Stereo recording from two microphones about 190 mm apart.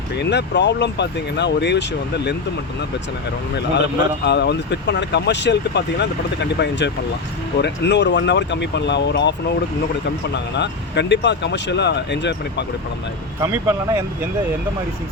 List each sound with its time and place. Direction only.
0.2 s speech: 65° left (ahead or behind)
3.8 s speech: 60° left (ahead or behind)
10.3 s speech: 65° left (ahead or behind)
13.5 s speech: 15° right (ahead or behind)